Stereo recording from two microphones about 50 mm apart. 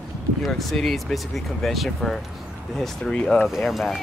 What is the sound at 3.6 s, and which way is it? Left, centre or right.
Speech, centre.